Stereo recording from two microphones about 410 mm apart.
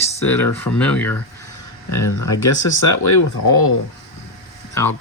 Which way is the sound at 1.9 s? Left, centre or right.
Left.